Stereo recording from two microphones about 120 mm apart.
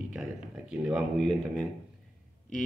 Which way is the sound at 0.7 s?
5° right (ahead or behind).